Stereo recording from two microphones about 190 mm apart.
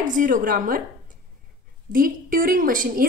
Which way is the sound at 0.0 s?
45° right (ahead or behind).